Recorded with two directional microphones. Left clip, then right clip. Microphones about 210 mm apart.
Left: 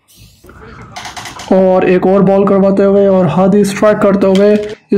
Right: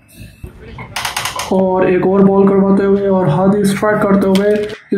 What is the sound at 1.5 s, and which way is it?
Speech, 40° left (ahead or behind).